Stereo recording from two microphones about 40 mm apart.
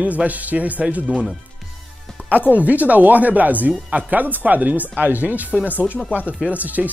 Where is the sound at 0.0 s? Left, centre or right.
Right.